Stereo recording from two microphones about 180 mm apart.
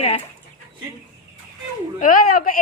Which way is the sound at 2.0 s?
50° left (ahead or behind).